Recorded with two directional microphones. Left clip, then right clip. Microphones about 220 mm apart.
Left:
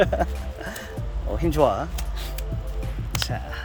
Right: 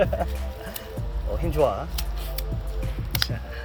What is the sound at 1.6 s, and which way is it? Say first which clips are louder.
Speech: left 2 dB; 35° left (ahead or behind).